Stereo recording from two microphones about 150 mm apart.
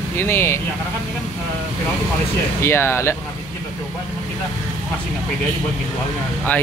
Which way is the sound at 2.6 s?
15° left (ahead or behind).